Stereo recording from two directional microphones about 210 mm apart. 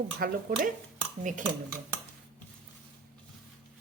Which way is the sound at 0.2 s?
45° right (ahead or behind).